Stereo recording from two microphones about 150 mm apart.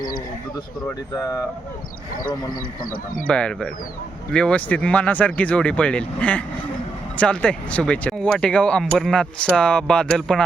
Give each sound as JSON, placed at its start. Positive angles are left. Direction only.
{"t": 1.1, "sound": "speech", "side_deg": 20}
{"t": 3.2, "sound": "speech", "side_deg": 5}